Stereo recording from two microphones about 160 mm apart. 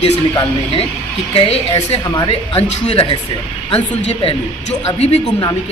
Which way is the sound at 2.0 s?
25° left (ahead or behind).